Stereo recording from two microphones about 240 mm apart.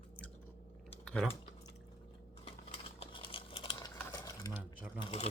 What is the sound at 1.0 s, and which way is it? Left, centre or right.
Typing, centre.